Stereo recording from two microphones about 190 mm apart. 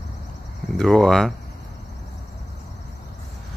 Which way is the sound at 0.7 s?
Centre (ahead or behind).